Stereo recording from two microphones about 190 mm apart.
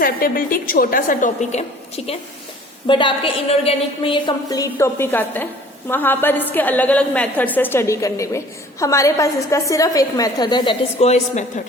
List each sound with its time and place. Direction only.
0.0 s a woman's voice: 50° left (ahead or behind)
2.8 s a woman's voice: 25° left (ahead or behind)
11.0 s a woman's voice: 35° left (ahead or behind)